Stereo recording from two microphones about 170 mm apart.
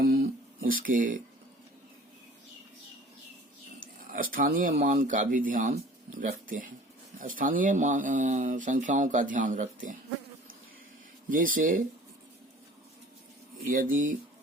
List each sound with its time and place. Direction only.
0.0 s a sound: 60° right (ahead or behind)
4.1 s speech: 55° right (ahead or behind)
11.3 s speech: 55° right (ahead or behind)
13.7 s speech: 55° right (ahead or behind)